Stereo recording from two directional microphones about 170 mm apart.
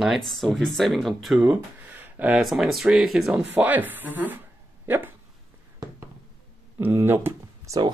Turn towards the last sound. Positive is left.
turn(degrees=-15)  # may be behind; listen again after turning